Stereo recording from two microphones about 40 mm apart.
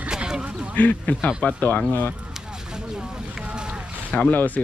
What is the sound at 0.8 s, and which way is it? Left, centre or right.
Speech, left.